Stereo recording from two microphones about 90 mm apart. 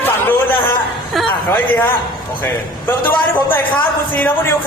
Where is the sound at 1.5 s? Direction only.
20° left (ahead or behind).